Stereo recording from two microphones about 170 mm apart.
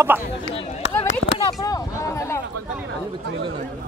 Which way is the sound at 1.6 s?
20° left (ahead or behind).